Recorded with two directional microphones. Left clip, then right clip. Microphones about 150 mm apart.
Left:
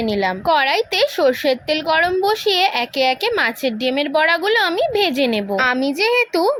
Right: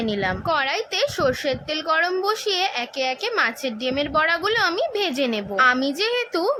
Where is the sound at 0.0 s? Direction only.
20° left (ahead or behind).